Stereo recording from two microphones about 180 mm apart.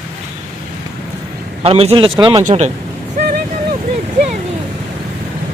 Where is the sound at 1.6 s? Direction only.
35° right (ahead or behind).